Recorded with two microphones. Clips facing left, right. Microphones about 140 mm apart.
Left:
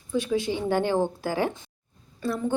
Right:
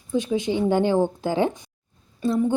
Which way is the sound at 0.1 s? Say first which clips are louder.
Right 3 dB; 20° right (ahead or behind).